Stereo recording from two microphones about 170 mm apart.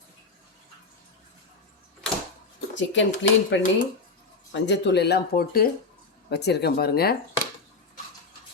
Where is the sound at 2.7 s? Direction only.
90° left; by 5.7 s 60° left (ahead or behind).